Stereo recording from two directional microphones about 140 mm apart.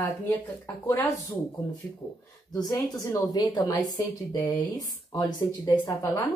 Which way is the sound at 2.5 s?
25° left (ahead or behind).